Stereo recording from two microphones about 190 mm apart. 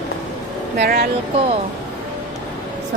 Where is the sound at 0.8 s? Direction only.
50° right (ahead or behind).